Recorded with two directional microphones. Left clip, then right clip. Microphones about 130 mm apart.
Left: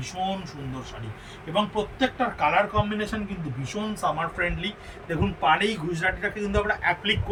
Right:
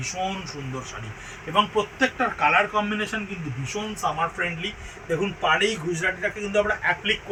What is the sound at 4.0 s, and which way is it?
A man's voice, 35° left (ahead or behind).